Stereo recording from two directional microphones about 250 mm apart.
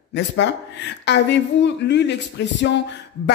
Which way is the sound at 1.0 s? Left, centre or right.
Left.